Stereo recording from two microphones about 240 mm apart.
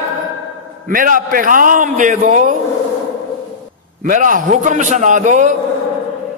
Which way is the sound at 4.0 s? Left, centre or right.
Right.